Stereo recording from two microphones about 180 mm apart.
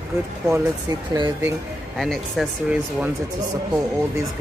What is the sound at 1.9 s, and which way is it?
Speech, centre (ahead or behind).